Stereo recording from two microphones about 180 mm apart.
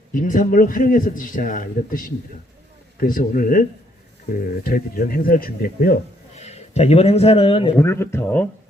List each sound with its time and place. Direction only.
0.1 s a man's voice: 45° left (ahead or behind)
6.3 s a man's voice: 40° left (ahead or behind)
7.8 s speech: 15° left (ahead or behind)